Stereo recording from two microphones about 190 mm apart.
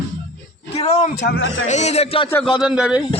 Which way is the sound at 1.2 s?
60° left (ahead or behind).